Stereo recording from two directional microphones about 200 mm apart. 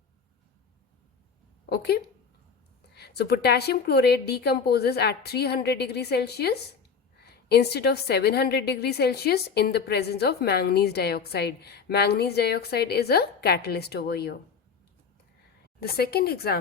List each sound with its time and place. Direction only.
1.7 s a woman's voice: 55° left (ahead or behind)
15.8 s a woman's voice: 50° left (ahead or behind)